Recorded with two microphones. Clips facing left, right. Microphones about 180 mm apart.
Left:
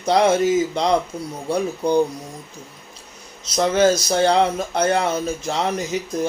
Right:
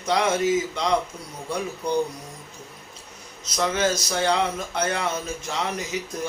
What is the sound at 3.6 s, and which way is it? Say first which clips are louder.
Speech: left 7 dB; 35° left (ahead or behind).